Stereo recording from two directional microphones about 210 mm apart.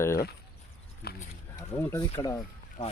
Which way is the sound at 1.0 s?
45° left (ahead or behind).